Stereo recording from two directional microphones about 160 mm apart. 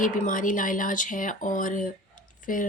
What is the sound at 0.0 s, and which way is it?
Speech, 55° left (ahead or behind).